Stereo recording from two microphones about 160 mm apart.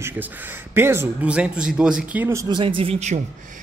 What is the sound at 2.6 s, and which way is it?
Speech, 35° right (ahead or behind).